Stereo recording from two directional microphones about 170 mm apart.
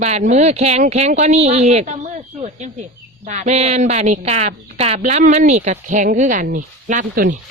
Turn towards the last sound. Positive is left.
turn(degrees=-55)  # may be behind; listen again after turning